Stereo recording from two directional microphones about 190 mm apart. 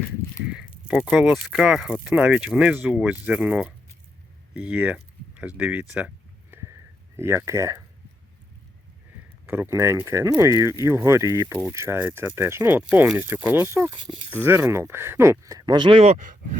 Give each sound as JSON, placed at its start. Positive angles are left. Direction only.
{"t": 0.9, "sound": "speech", "side_deg": -5}
{"t": 6.5, "sound": "a sound", "side_deg": -15}
{"t": 7.2, "sound": "speech", "side_deg": -15}
{"t": 9.5, "sound": "speech", "side_deg": -10}